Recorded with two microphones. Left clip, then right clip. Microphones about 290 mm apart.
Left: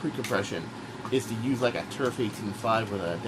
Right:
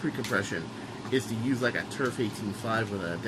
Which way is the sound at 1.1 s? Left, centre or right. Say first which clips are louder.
Left 1 dB; centre.